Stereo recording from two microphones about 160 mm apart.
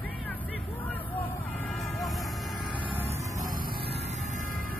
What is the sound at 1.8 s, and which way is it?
Vehicle, centre (ahead or behind).